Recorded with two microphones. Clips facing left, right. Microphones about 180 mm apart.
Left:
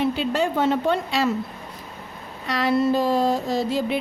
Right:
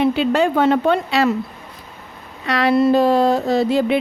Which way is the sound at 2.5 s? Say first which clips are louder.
Right 5 dB; 70° right (ahead or behind).